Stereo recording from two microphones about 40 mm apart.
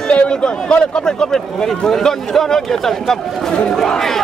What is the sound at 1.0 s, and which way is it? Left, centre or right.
A man's voice, centre.